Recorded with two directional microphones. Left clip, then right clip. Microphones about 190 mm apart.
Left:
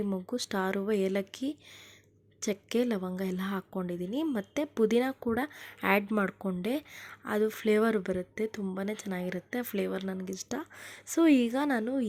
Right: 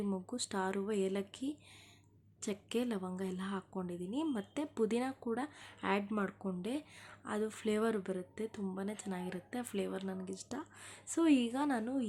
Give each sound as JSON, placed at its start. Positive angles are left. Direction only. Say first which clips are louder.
{"t": 0.0, "sound": "a woman's voice", "louder": "left 6 dB", "side_deg": 25}